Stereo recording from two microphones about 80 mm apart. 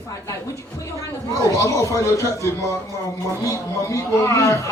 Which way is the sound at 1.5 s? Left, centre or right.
Left.